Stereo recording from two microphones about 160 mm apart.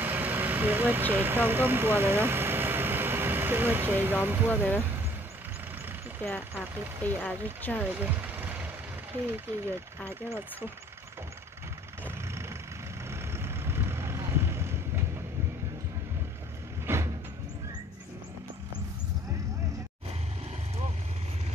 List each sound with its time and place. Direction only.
0.0 s speech: 10° right (ahead or behind)
7.2 s speech: 10° left (ahead or behind)
7.9 s vehicle: 10° right (ahead or behind)
9.1 s speech: 15° right (ahead or behind)
12.0 s vehicle: 15° right (ahead or behind)
16.8 s vehicle: 15° right (ahead or behind)